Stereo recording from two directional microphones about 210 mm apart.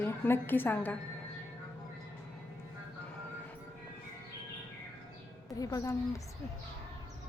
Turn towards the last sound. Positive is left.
turn(degrees=15)  # may be behind; listen again after turning